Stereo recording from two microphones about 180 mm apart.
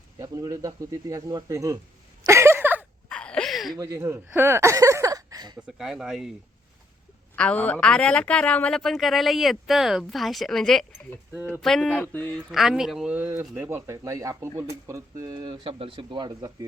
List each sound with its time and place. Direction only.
0.2 s speech: 20° right (ahead or behind)
2.2 s a sound: 15° right (ahead or behind)
3.1 s a sound: 5° left (ahead or behind)
3.8 s speech: 15° right (ahead or behind)
5.5 s speech: centre (ahead or behind)
7.3 s speech: 5° left (ahead or behind)
12.5 s speech: centre (ahead or behind); by 16.6 s 20° right (ahead or behind)